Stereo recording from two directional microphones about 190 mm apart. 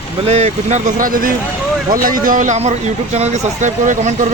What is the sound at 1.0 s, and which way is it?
A man's voice, 45° right (ahead or behind).